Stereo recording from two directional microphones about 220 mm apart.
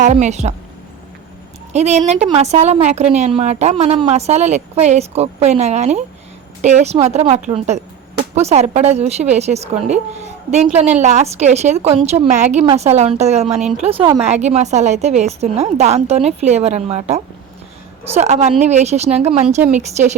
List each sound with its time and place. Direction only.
0.0 s a woman's voice: 35° right (ahead or behind)
1.7 s a woman's voice: 30° right (ahead or behind)
13.6 s speech: 5° right (ahead or behind)
13.8 s a woman's voice: 25° right (ahead or behind)